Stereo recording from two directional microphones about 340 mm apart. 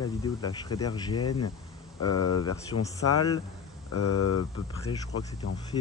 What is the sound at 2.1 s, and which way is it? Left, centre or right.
Speech, left.